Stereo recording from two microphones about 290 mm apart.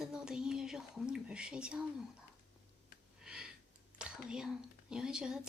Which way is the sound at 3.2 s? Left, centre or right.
Centre.